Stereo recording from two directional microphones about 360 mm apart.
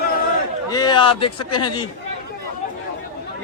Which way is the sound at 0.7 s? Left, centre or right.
Centre.